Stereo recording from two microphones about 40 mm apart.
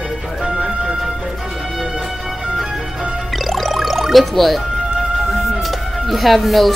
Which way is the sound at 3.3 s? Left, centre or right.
Centre.